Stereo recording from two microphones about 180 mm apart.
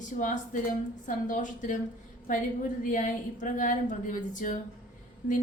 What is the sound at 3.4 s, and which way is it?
A woman's voice, 45° left (ahead or behind).